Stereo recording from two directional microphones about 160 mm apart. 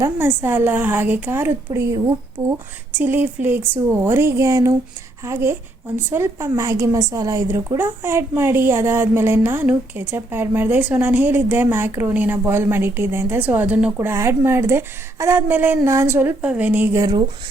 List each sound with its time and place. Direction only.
0.0 s a woman's voice: 15° right (ahead or behind)